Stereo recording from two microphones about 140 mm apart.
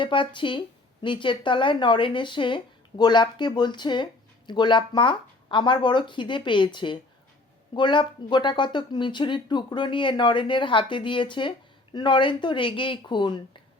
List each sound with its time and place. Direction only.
0.0 s speech: 35° left (ahead or behind)